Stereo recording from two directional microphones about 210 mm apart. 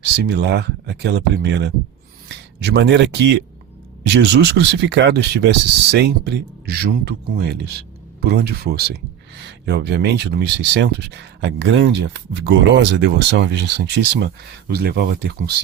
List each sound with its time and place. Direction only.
0.0 s speech: 55° right (ahead or behind)